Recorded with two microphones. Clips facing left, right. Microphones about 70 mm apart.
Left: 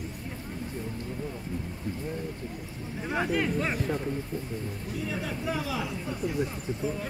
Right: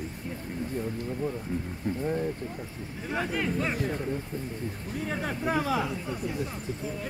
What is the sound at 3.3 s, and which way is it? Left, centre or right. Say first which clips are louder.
Speech: left 1 dB; centre.